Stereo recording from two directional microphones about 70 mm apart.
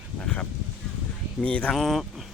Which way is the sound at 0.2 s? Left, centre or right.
Centre.